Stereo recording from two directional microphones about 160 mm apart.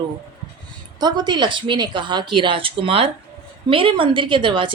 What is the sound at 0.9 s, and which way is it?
A woman's voice, 25° right (ahead or behind).